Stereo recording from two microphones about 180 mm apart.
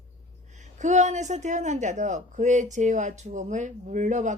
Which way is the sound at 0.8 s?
40° right (ahead or behind).